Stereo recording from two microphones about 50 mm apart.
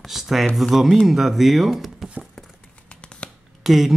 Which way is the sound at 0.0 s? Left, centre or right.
Centre.